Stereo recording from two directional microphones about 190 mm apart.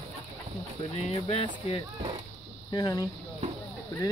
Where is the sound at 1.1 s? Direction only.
25° left (ahead or behind).